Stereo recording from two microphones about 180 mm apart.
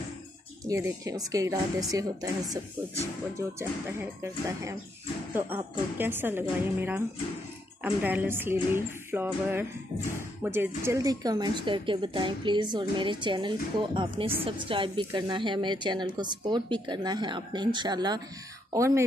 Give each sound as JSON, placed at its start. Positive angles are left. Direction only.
{"t": 0.7, "sound": "speech", "side_deg": -15}
{"t": 3.3, "sound": "music", "side_deg": -15}
{"t": 10.1, "sound": "speech", "side_deg": -10}
{"t": 18.7, "sound": "music", "side_deg": -15}